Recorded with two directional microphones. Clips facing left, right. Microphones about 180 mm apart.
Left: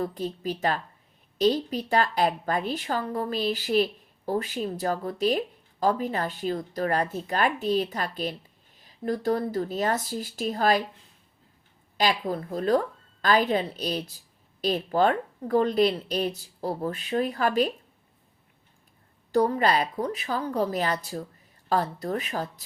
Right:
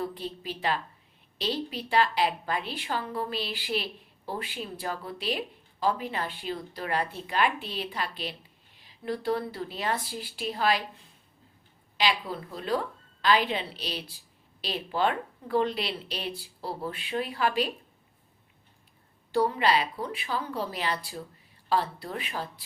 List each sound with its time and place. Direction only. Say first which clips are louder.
0.0 s speech: left 5 dB; 45° left (ahead or behind)
11.9 s speech: left 3 dB; 45° left (ahead or behind)
19.3 s speech: left 2 dB; 45° left (ahead or behind)